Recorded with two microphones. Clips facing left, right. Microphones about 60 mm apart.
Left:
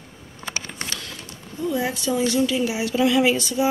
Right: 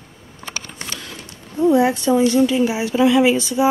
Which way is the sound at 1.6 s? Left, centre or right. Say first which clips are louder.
Right 10 dB; right.